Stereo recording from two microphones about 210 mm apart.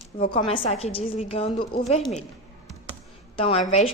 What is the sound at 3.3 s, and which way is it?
Speech, 25° left (ahead or behind).